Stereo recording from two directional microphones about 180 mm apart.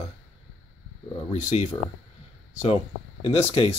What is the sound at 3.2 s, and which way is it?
Speech, 30° left (ahead or behind).